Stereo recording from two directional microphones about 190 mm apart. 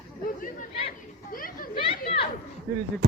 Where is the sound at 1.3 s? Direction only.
50° left (ahead or behind).